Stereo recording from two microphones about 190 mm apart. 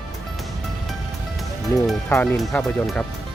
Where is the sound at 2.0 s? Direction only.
10° left (ahead or behind).